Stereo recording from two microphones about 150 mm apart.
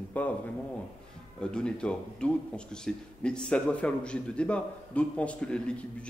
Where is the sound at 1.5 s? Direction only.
5° left (ahead or behind).